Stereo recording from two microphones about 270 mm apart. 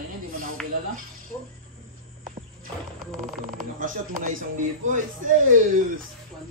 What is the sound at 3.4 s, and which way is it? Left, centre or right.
Speech, right.